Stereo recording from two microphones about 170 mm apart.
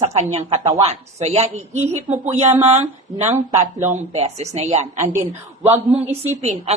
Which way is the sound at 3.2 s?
15° right (ahead or behind).